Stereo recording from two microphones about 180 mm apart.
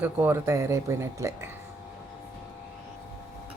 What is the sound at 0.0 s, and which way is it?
Speech, 10° right (ahead or behind).